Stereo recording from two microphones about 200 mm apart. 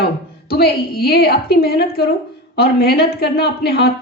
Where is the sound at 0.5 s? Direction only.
50° left (ahead or behind).